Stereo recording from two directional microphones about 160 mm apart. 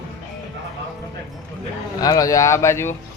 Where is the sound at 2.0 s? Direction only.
20° left (ahead or behind).